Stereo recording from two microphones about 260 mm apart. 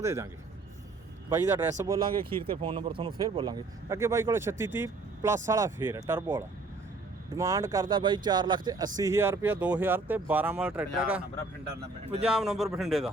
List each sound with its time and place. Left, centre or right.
0.0 s speech: centre
1.8 s speech: centre
12.2 s speech: centre